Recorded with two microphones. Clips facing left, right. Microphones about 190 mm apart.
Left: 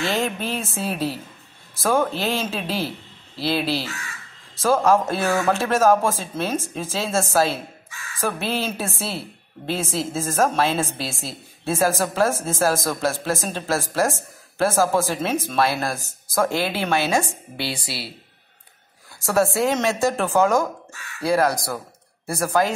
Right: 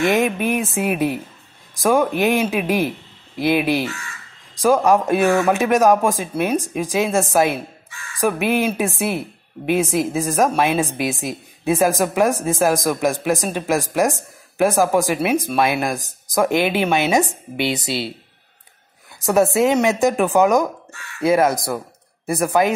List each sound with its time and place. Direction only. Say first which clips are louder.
0.0 s speech: right 6 dB; 15° right (ahead or behind)
19.1 s speech: right 4 dB; 20° right (ahead or behind)